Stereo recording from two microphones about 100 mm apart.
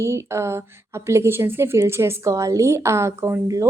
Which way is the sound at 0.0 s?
30° right (ahead or behind).